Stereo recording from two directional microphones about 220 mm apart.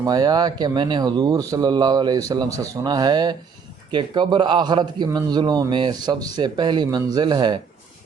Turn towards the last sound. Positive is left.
turn(degrees=-20)  # may be behind; listen again after turning